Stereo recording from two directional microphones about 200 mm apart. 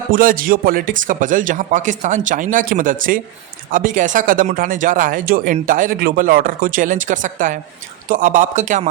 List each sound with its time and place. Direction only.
0.1 s speech: 45° right (ahead or behind)